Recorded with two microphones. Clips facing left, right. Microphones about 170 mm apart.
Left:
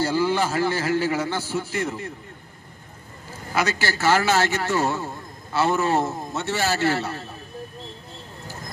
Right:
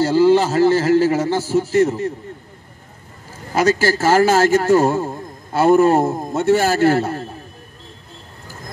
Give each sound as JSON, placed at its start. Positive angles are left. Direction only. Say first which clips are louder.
{"t": 0.0, "sound": "a man's voice", "louder": "right 9 dB", "side_deg": -35}
{"t": 3.5, "sound": "a man's voice", "louder": "right 8 dB", "side_deg": -40}